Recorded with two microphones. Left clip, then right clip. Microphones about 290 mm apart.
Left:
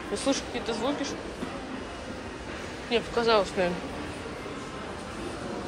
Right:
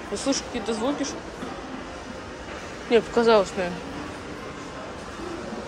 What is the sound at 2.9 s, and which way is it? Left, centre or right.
Speech, centre.